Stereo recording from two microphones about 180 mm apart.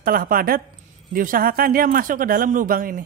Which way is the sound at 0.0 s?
55° right (ahead or behind).